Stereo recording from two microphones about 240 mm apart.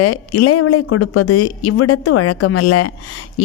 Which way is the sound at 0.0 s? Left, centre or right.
Left.